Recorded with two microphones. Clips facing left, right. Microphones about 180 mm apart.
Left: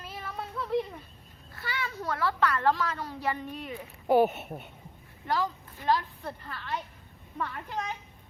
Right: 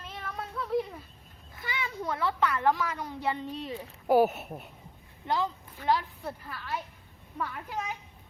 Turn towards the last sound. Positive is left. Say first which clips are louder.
# left 1 dB
turn(degrees=-5)  # may be behind; listen again after turning